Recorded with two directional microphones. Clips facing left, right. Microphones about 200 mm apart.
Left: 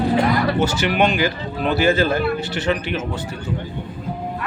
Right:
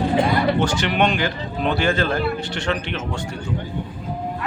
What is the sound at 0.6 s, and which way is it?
A man's voice, 5° left (ahead or behind).